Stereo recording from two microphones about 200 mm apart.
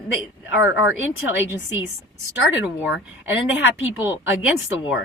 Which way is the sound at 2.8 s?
5° right (ahead or behind).